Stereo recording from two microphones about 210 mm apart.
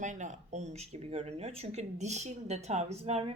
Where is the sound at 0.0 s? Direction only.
35° right (ahead or behind).